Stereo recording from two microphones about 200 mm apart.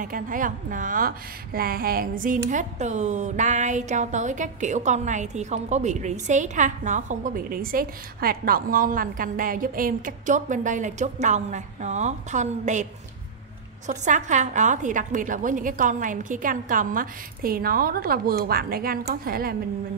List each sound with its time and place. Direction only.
0.0 s a woman's voice: 40° right (ahead or behind)
13.8 s a woman's voice: 35° right (ahead or behind)